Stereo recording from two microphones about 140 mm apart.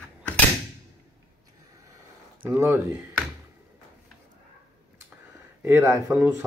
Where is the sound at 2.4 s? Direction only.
15° right (ahead or behind).